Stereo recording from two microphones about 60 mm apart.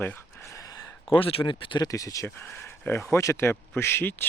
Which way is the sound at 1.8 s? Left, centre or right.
Left.